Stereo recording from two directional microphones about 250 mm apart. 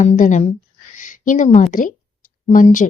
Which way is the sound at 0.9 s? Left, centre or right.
Left.